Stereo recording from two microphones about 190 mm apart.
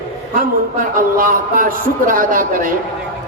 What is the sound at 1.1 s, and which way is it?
Speech, 45° right (ahead or behind).